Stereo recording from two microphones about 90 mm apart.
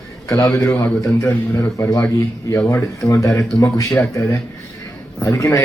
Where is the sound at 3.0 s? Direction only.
35° left (ahead or behind).